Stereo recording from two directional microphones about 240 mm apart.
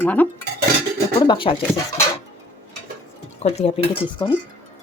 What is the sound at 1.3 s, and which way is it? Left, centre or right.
Speech, centre.